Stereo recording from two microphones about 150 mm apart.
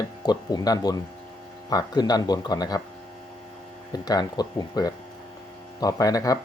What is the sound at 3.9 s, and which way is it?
Speech, 25° left (ahead or behind).